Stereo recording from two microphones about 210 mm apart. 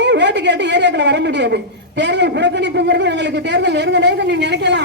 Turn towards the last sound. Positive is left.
turn(degrees=-55)  # may be behind; listen again after turning